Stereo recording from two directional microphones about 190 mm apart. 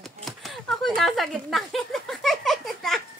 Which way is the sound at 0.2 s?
Centre (ahead or behind).